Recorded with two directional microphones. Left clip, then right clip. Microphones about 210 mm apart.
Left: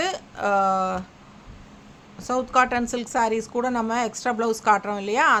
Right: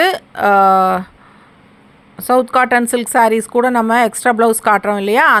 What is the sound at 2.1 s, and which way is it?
Speech, 40° right (ahead or behind).